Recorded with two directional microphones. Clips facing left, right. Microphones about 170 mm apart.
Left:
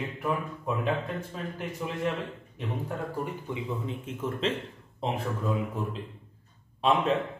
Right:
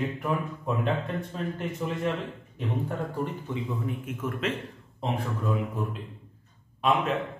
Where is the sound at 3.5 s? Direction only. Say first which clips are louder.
Right 2 dB; 25° left (ahead or behind).